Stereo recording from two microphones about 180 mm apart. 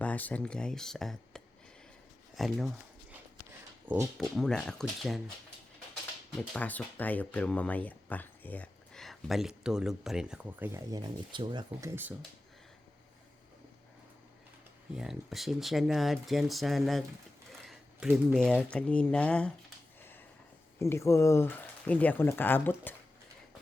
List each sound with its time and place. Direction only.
0.0 s speech: 10° left (ahead or behind)
2.3 s a sound: centre (ahead or behind)
3.8 s speech: 15° right (ahead or behind)
4.2 s speech: centre (ahead or behind)
6.3 s speech: 5° left (ahead or behind)
10.7 s speech: 20° right (ahead or behind)
14.9 s speech: centre (ahead or behind)
20.7 s speech: 15° left (ahead or behind)